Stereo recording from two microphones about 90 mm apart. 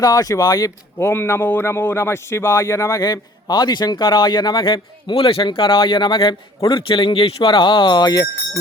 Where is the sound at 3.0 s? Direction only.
45° left (ahead or behind).